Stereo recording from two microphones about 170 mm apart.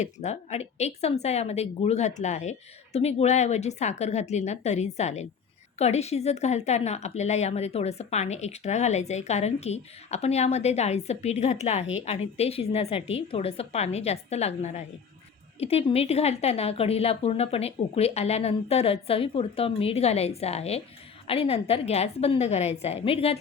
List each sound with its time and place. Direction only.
0.0 s speech: 40° left (ahead or behind)